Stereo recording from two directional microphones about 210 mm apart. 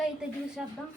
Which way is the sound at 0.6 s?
5° right (ahead or behind).